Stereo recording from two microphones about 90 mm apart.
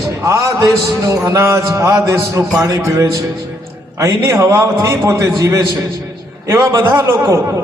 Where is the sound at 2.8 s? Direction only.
35° right (ahead or behind).